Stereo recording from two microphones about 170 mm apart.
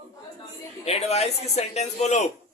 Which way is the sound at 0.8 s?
40° left (ahead or behind).